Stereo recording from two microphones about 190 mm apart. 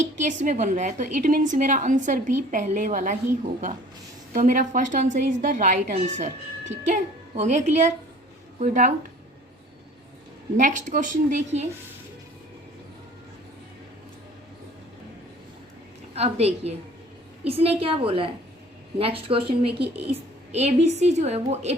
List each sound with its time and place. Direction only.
0.2 s a woman's voice: 40° right (ahead or behind)
4.4 s a woman's voice: 45° right (ahead or behind)
10.6 s a woman's voice: 40° right (ahead or behind)
16.1 s a woman's voice: 35° right (ahead or behind)